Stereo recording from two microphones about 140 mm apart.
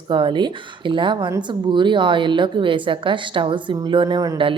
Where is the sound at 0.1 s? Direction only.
35° right (ahead or behind).